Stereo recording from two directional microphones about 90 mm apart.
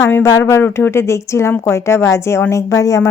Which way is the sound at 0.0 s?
30° left (ahead or behind).